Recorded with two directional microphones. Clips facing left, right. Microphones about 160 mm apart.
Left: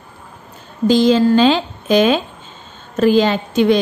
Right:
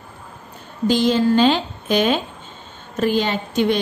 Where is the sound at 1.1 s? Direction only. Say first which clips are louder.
Left 3 dB; 90° left.